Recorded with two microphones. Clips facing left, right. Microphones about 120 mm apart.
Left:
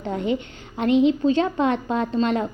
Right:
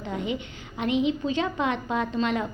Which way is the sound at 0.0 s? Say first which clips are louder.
Left 6 dB; 40° left (ahead or behind).